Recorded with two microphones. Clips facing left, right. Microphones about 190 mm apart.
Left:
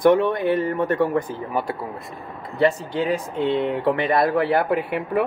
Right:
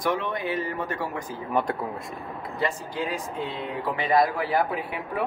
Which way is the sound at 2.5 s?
65° left (ahead or behind).